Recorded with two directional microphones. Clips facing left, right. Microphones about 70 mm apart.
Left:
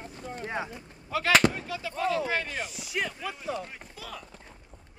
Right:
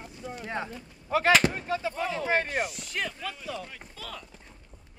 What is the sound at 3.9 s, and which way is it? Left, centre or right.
Speech, centre.